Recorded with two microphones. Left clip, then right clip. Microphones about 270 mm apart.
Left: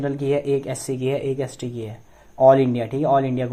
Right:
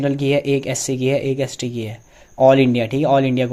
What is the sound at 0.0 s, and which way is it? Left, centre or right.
Speech, right.